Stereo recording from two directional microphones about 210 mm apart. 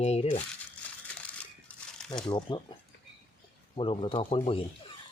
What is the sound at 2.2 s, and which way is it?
Speech, 20° left (ahead or behind).